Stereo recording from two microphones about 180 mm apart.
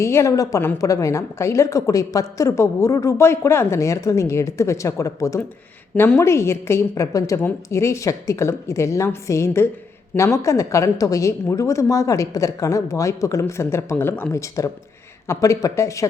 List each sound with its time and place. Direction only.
0.0 s a woman's voice: 15° left (ahead or behind)